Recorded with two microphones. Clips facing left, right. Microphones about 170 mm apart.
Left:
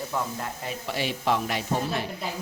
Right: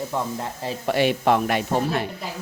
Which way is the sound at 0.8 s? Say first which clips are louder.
Right 8 dB; 60° right (ahead or behind).